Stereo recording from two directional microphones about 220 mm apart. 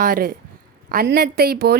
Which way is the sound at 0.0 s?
40° right (ahead or behind).